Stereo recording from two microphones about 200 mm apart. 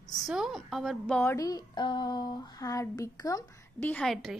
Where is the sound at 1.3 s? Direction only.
20° left (ahead or behind).